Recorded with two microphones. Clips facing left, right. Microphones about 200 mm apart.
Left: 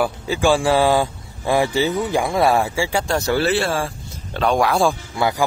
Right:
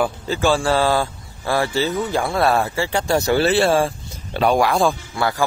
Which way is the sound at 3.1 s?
10° right (ahead or behind).